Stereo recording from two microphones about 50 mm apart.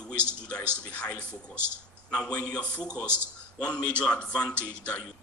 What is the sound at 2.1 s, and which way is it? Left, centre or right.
Speech, centre.